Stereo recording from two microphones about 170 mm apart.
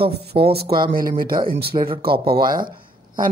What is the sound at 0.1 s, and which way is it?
Speech, 70° right (ahead or behind).